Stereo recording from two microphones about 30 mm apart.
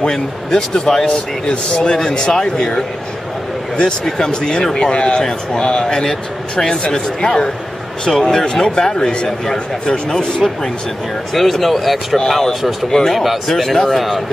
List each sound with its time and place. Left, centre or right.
0.0 s speech: left
2.0 s speech: left
4.0 s speech: left
8.6 s speech: left
11.3 s speech: centre